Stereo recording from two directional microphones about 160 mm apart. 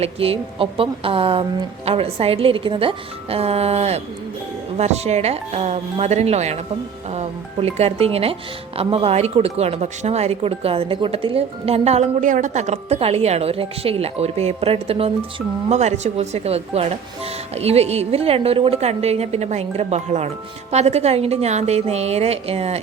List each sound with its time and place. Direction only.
0.0 s speech: 35° right (ahead or behind)